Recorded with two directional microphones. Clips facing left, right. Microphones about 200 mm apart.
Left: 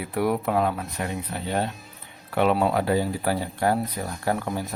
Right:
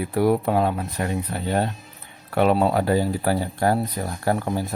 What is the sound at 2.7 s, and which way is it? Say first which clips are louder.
Speech: right 2 dB; 40° right (ahead or behind).